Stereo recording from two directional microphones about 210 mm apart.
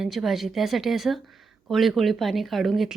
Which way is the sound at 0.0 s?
Centre (ahead or behind).